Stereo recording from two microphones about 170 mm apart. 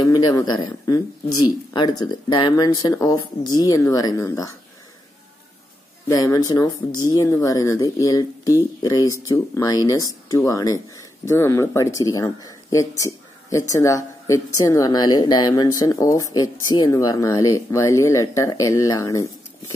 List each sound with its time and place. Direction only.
0.0 s speech: 20° left (ahead or behind)
6.0 s speech: 20° left (ahead or behind)